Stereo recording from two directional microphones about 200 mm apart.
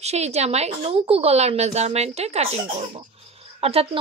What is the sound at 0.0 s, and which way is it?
A woman's voice, 35° right (ahead or behind).